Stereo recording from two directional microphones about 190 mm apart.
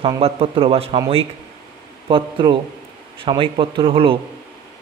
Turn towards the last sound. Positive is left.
turn(degrees=-25)  # may be behind; listen again after turning